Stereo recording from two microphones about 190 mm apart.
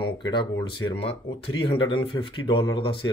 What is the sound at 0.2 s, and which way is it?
Speech, 25° left (ahead or behind).